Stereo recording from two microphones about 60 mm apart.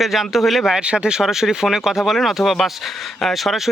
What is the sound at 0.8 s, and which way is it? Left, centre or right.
Speech, centre.